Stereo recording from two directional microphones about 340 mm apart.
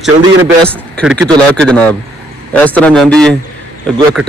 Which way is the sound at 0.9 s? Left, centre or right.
Centre.